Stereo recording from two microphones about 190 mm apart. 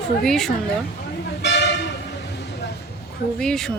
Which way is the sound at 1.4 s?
65° left (ahead or behind).